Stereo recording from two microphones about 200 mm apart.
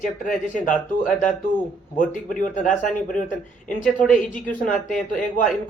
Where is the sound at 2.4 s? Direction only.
40° left (ahead or behind).